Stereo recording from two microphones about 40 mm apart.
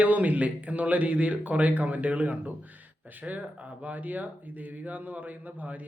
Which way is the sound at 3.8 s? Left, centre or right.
Right.